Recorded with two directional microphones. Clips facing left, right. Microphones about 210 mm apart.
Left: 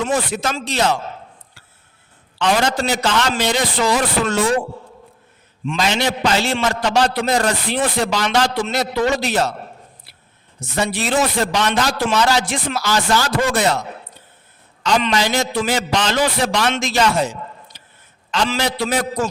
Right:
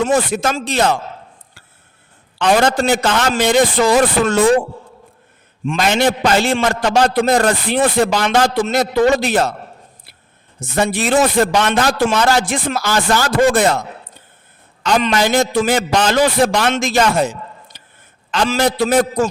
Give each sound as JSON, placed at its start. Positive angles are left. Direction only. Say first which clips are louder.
{"t": 0.0, "sound": "a man's voice", "louder": "right 5 dB", "side_deg": -45}
{"t": 2.4, "sound": "a man's voice", "louder": "right 4 dB", "side_deg": -55}
{"t": 5.6, "sound": "a man's voice", "louder": "right 4 dB", "side_deg": -55}
{"t": 10.6, "sound": "a man's voice", "louder": "right 4 dB", "side_deg": -50}
{"t": 14.8, "sound": "a man's voice", "louder": "right 3 dB", "side_deg": -50}